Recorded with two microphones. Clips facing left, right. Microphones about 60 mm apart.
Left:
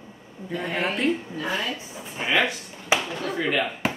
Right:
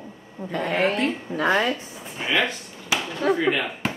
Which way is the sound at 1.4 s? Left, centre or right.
Right.